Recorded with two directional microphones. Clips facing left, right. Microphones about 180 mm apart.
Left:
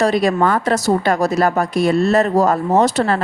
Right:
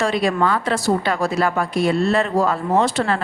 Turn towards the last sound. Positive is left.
turn(degrees=40)  # may be behind; listen again after turning